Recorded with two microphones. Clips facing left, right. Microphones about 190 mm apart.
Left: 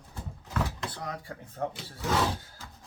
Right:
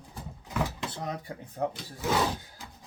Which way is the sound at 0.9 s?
20° right (ahead or behind).